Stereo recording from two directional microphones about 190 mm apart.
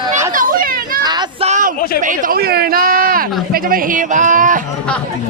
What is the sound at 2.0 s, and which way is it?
Speech, 45° right (ahead or behind).